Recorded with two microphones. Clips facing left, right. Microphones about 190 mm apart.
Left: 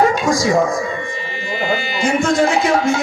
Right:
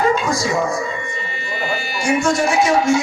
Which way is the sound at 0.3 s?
90° left.